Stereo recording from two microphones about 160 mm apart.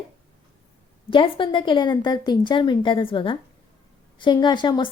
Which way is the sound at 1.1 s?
30° left (ahead or behind).